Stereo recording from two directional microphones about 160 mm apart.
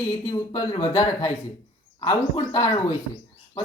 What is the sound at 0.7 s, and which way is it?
Speech, 25° left (ahead or behind).